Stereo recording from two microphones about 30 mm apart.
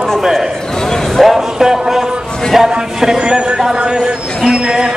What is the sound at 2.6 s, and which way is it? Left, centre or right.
Speech, centre.